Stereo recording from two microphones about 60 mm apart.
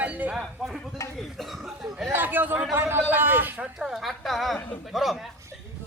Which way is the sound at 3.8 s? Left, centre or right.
Centre.